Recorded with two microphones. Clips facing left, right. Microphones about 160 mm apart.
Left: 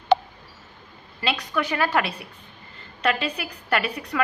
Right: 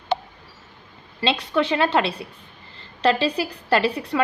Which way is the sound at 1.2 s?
25° right (ahead or behind).